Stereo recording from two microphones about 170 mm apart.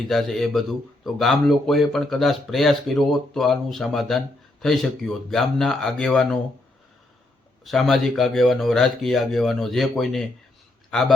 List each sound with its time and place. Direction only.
0.1 s speech: centre (ahead or behind)
7.6 s speech: centre (ahead or behind)